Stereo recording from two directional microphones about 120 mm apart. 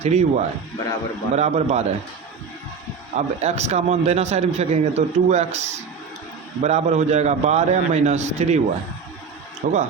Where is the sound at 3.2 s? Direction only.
65° right (ahead or behind).